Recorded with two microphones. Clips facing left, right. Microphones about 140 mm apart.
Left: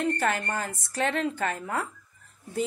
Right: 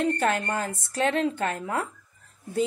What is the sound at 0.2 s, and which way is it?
A woman's voice, 25° right (ahead or behind).